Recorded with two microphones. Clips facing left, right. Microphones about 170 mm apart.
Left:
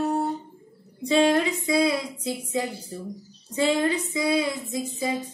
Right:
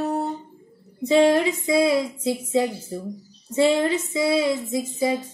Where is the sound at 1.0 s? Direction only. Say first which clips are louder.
Right 3 dB; 20° right (ahead or behind).